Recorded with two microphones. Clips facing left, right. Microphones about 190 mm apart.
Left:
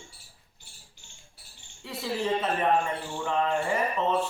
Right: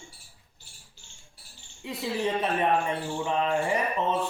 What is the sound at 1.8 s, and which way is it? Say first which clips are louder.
Speech: right 1 dB; 15° right (ahead or behind).